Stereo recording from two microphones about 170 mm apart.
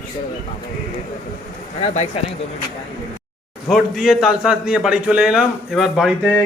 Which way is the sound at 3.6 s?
Centre (ahead or behind).